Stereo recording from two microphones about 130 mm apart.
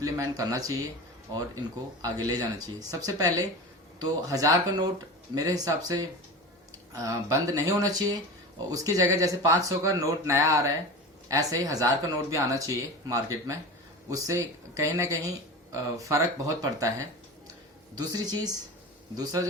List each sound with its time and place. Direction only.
0.0 s speech: 25° right (ahead or behind)
2.0 s speech: 25° right (ahead or behind)
17.9 s speech: 30° right (ahead or behind)